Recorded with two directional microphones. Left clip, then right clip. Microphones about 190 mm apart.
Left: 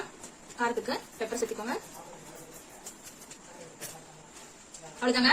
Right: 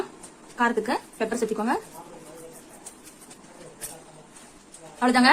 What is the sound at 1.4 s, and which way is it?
Speech, 45° right (ahead or behind).